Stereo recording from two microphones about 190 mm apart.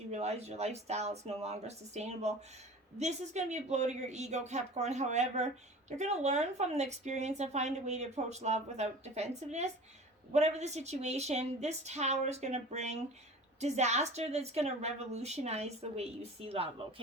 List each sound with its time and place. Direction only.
0.1 s a woman's voice: 35° right (ahead or behind)